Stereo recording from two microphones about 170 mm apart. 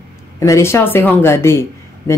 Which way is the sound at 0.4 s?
15° left (ahead or behind).